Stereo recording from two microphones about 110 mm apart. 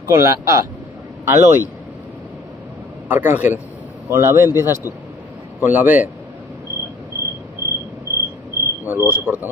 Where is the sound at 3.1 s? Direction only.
15° right (ahead or behind).